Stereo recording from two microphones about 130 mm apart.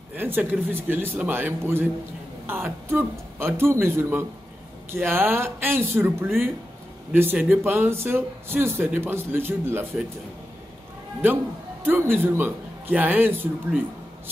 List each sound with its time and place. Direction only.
0.1 s speech: 15° right (ahead or behind)
11.8 s a man's voice: 15° right (ahead or behind)